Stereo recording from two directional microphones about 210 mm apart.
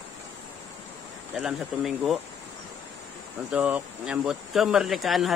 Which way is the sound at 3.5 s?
5° right (ahead or behind).